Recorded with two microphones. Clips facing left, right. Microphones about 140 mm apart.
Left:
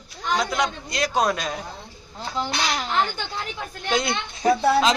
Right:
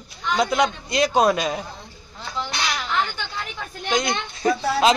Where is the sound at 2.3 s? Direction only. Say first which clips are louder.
Left 2 dB; 35° left (ahead or behind).